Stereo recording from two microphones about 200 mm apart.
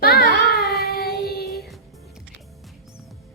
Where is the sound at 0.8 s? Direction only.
50° left (ahead or behind).